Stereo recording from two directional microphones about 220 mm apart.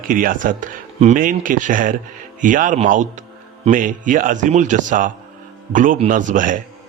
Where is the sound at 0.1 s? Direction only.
40° right (ahead or behind).